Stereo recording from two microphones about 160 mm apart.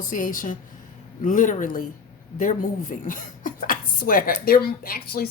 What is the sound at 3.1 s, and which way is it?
Speech, 55° left (ahead or behind).